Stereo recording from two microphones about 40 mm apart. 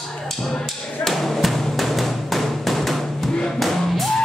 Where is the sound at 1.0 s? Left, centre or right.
Centre.